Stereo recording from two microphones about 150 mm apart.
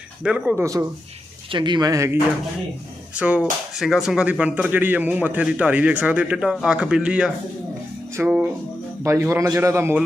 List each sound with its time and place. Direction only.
0.2 s a man's voice: 5° right (ahead or behind)
0.6 s a man's voice: 20° right (ahead or behind)
1.5 s a man's voice: 30° right (ahead or behind)
3.2 s a man's voice: 10° right (ahead or behind)